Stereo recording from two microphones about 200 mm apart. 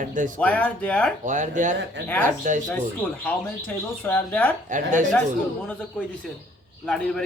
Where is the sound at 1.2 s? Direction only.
40° right (ahead or behind).